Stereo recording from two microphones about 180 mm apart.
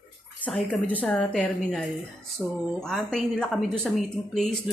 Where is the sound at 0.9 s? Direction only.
5° left (ahead or behind).